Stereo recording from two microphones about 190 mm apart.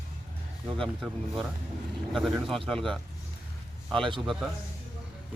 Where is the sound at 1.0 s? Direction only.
Centre (ahead or behind).